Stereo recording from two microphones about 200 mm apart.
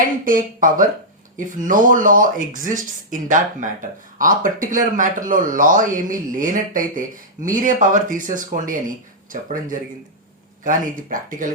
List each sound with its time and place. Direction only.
0.3 s speech: 45° right (ahead or behind)